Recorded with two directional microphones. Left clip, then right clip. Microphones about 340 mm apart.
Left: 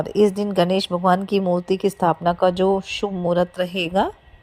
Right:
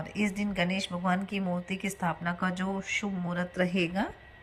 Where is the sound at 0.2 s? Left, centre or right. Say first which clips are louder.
Left 13 dB; left.